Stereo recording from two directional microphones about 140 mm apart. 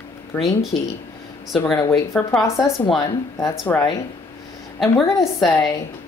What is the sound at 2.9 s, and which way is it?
Speech, 30° left (ahead or behind).